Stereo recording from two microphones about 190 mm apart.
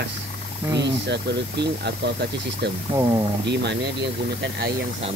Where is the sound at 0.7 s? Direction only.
65° right (ahead or behind).